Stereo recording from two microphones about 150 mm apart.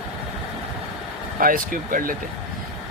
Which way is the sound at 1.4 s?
70° right (ahead or behind).